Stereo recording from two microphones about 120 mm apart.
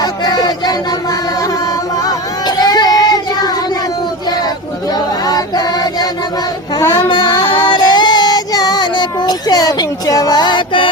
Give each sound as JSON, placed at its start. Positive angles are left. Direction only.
{"t": 0.0, "sound": "a sound", "side_deg": 35}
{"t": 2.6, "sound": "child singing", "side_deg": 35}
{"t": 5.2, "sound": "music", "side_deg": 35}
{"t": 6.9, "sound": "female singing", "side_deg": 40}